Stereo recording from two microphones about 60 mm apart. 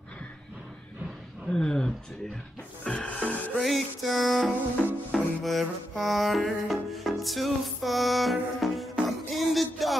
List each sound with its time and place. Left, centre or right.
1.5 s speech: centre
2.8 s music: centre
3.5 s music: centre